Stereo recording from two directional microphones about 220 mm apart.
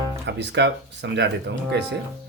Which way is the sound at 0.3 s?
50° right (ahead or behind).